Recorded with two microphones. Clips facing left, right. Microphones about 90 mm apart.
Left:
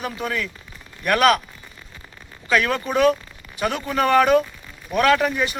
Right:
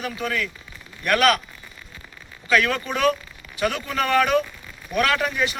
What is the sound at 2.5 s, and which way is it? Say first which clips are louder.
A man's voice: left 1 dB; 25° left (ahead or behind).